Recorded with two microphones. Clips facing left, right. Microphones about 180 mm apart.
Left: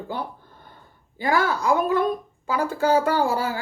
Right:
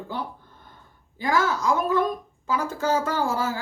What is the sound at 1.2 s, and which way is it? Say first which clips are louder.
Speech: left 1 dB; 60° left (ahead or behind).